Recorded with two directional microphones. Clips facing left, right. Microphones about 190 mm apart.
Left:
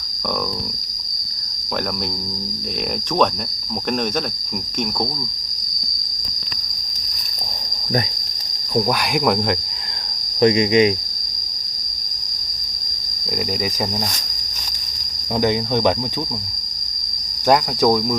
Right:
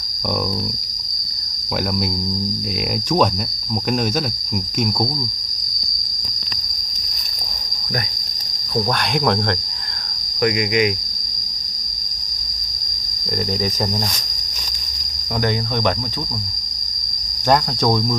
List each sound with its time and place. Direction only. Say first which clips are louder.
8.7 s cricket: left 1 dB; 10° left (ahead or behind)
10.4 s cricket: left 4 dB; 25° left (ahead or behind)
15.4 s cricket: left 3 dB; 15° left (ahead or behind)
17.5 s cricket: left 2 dB; 5° left (ahead or behind)